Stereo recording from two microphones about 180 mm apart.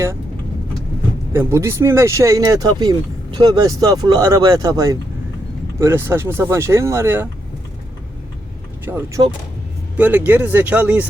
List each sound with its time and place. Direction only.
1.3 s speech: 15° right (ahead or behind)
8.8 s speech: 10° right (ahead or behind)